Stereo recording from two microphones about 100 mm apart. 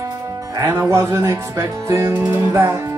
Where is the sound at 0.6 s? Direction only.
30° right (ahead or behind).